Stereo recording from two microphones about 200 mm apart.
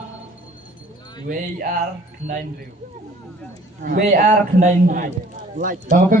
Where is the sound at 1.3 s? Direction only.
45° right (ahead or behind).